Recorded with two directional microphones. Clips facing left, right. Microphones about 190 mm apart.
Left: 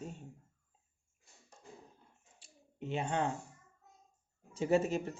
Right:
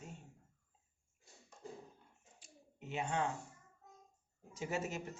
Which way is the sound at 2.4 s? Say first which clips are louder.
Left 9 dB; 30° left (ahead or behind).